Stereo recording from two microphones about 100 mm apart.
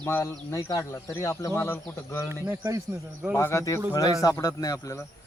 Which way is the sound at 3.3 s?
30° left (ahead or behind).